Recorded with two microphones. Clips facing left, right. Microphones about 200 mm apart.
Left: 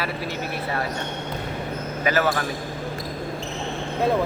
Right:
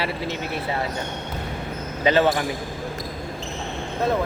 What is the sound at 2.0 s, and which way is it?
Speech, 25° right (ahead or behind).